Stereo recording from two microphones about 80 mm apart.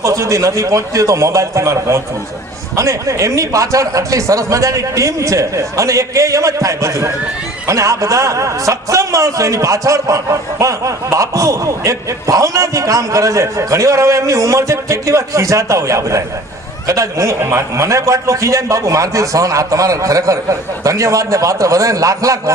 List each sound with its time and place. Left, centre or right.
0.0 s a man's voice: right